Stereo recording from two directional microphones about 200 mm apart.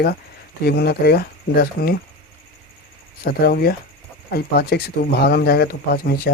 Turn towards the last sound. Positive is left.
turn(degrees=45)  # may be behind; listen again after turning